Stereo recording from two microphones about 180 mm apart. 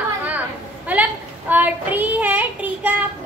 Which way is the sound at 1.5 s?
10° right (ahead or behind).